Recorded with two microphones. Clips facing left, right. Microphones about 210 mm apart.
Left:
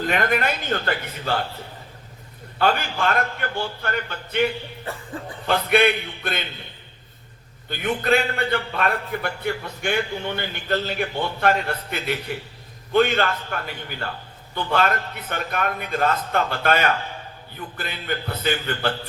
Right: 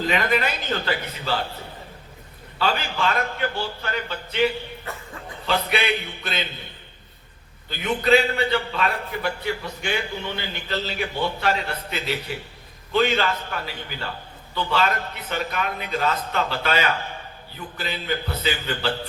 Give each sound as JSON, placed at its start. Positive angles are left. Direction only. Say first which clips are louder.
{"t": 0.0, "sound": "a man's voice", "louder": "even", "side_deg": 55}
{"t": 2.6, "sound": "a man's voice", "louder": "left 3 dB", "side_deg": 50}
{"t": 5.1, "sound": "speech", "louder": "left 6 dB", "side_deg": 35}
{"t": 5.5, "sound": "a man's voice", "louder": "left 4 dB", "side_deg": 55}
{"t": 7.7, "sound": "a man's voice", "louder": "right 2 dB", "side_deg": 50}